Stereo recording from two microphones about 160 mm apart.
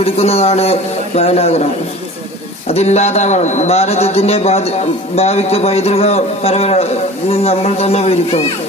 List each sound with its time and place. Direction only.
0.0 s a man's voice: 40° left (ahead or behind)
2.7 s a man's voice: 45° left (ahead or behind)